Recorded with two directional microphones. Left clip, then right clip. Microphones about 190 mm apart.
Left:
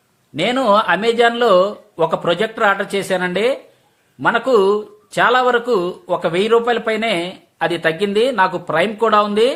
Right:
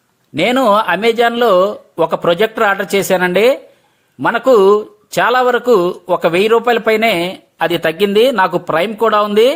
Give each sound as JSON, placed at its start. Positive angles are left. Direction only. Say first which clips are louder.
{"t": 0.3, "sound": "speech", "louder": "right 3 dB", "side_deg": -40}